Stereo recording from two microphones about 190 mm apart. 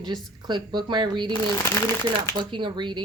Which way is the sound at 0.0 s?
20° right (ahead or behind).